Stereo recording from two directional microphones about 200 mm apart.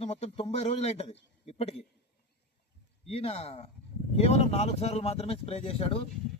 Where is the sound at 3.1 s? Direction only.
30° left (ahead or behind).